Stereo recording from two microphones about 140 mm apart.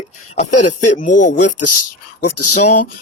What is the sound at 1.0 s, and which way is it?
Speech, 65° left (ahead or behind).